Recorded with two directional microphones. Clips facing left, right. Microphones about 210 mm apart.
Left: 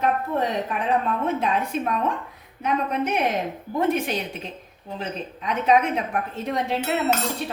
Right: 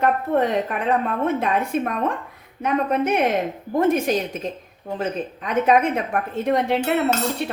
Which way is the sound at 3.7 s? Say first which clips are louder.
Right 4 dB; 45° right (ahead or behind).